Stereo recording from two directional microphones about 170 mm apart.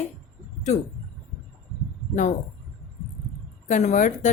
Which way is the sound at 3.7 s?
45° left (ahead or behind).